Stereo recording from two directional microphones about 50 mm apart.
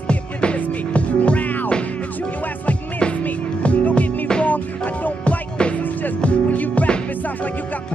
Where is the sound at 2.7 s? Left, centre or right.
Left.